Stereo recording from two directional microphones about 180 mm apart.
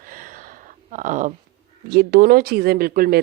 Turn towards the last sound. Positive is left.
turn(degrees=-55)  # may be behind; listen again after turning